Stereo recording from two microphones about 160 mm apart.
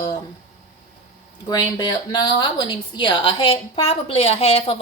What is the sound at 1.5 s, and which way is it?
A woman's voice, 25° left (ahead or behind).